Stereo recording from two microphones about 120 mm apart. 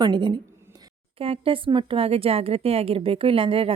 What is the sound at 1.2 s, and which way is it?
A woman's voice, 50° right (ahead or behind).